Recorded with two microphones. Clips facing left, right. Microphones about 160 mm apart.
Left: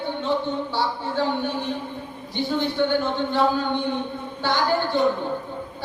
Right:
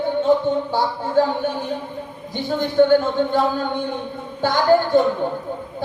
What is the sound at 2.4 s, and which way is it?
Speech, 45° right (ahead or behind).